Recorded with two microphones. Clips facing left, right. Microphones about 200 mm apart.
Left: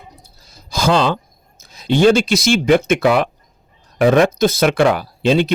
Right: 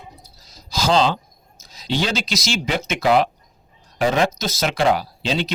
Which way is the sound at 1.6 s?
55° left (ahead or behind).